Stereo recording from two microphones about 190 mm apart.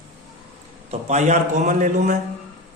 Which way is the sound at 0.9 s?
35° right (ahead or behind).